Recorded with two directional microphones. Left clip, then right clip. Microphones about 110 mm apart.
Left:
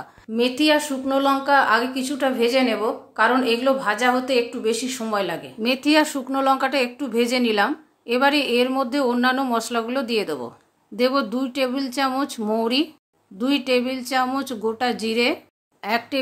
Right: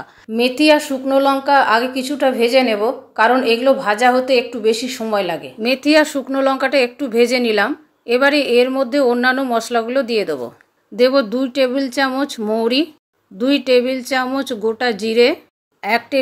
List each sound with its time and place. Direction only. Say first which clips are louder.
0.3 s speech: right 6 dB; 35° right (ahead or behind)